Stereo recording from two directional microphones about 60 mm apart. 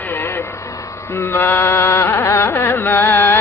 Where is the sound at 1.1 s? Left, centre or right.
Left.